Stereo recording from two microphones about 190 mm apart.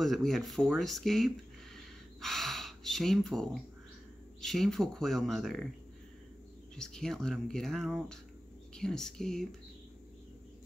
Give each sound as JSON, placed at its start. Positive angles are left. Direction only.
{"t": 0.0, "sound": "speech", "side_deg": 0}
{"t": 6.8, "sound": "speech", "side_deg": 5}